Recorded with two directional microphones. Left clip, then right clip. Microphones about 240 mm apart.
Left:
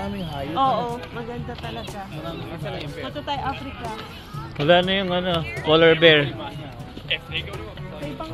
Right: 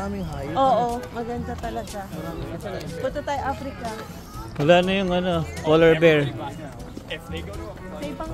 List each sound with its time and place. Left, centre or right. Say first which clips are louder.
0.6 s speech: right 2 dB; right
3.3 s speech: left 2 dB; right
4.6 s speech: even; centre